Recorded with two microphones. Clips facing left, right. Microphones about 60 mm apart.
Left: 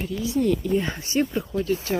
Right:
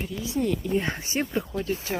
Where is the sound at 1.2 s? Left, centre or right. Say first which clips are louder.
Left 5 dB; centre.